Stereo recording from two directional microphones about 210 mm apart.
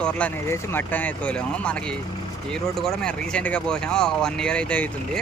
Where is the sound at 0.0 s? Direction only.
5° left (ahead or behind).